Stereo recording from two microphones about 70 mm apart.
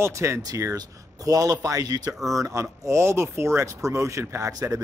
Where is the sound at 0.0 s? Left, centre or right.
Right.